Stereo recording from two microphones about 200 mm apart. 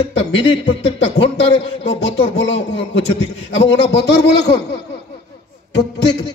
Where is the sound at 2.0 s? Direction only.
65° left (ahead or behind).